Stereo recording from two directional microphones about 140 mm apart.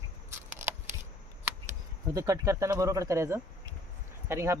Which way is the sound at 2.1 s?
25° right (ahead or behind).